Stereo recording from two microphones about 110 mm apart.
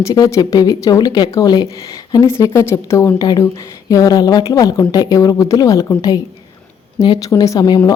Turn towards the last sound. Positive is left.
turn(degrees=40)  # may be behind; listen again after turning